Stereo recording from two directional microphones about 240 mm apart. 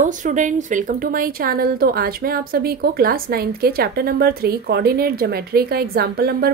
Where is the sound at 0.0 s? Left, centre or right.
Right.